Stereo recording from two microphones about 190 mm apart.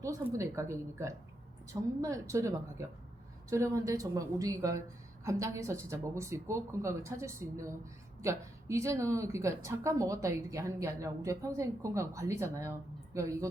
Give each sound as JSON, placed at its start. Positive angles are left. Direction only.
{"t": 0.0, "sound": "a woman's voice", "side_deg": -15}